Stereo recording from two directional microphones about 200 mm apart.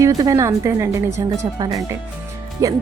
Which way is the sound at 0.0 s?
15° right (ahead or behind).